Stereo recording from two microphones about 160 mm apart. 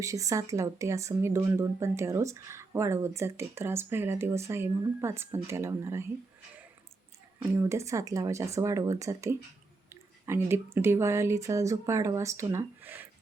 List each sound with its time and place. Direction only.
0.0 s speech: 20° right (ahead or behind)
7.3 s speech: 15° right (ahead or behind)